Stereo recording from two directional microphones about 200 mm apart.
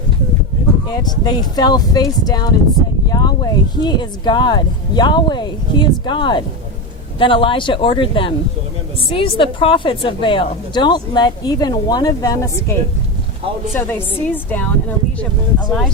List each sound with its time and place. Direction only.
1.2 s a woman's voice: 20° left (ahead or behind)
13.7 s a woman's voice: 10° left (ahead or behind)